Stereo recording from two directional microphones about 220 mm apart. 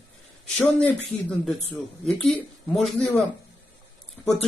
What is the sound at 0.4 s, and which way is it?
Speech, 5° left (ahead or behind).